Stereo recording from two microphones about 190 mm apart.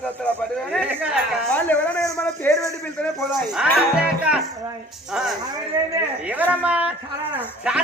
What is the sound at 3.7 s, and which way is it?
A man's voice, 5° right (ahead or behind).